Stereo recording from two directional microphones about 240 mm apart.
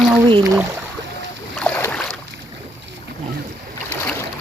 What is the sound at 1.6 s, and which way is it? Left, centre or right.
Boat, centre.